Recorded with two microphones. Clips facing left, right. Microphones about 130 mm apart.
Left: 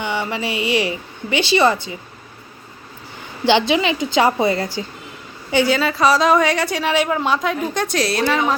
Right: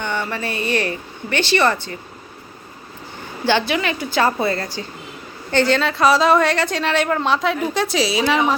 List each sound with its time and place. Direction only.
0.0 s speech: 10° left (ahead or behind)
3.4 s a woman's voice: 20° left (ahead or behind); by 8.5 s 5° right (ahead or behind)